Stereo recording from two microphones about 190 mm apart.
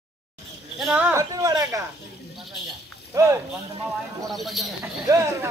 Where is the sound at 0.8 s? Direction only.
5° right (ahead or behind).